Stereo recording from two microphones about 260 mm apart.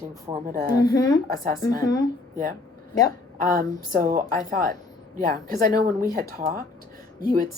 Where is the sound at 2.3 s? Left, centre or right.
Right.